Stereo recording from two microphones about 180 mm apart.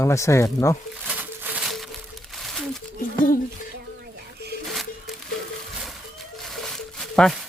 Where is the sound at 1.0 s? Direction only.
10° right (ahead or behind).